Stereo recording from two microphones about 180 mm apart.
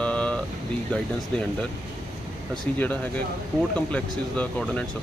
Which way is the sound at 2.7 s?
10° left (ahead or behind).